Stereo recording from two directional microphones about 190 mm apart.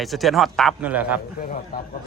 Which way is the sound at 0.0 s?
Centre (ahead or behind).